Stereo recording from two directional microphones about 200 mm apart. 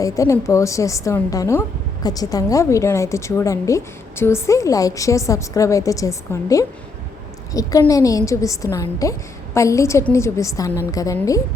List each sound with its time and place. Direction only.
0.0 s a woman's voice: 15° left (ahead or behind)